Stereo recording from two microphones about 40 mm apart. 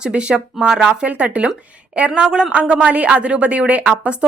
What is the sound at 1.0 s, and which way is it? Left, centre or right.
A woman's voice, right.